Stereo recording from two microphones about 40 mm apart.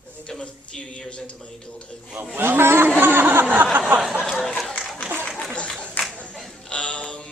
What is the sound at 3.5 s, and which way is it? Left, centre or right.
Speech, right.